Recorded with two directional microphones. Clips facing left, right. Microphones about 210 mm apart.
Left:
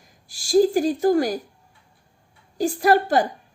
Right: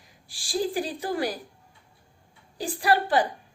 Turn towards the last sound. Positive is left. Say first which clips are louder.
# left 5 dB
turn(degrees=45)  # may be behind; listen again after turning